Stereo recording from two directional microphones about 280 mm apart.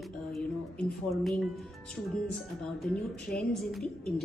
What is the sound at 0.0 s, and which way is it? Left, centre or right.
A woman's voice, centre.